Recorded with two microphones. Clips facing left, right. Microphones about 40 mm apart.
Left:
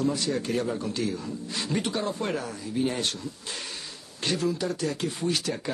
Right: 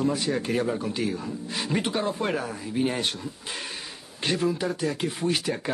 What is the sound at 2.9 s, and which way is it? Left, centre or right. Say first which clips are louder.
Speech: right 1 dB; centre.